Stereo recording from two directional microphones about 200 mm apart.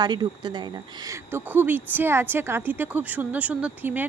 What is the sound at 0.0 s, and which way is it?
Speech, 20° right (ahead or behind).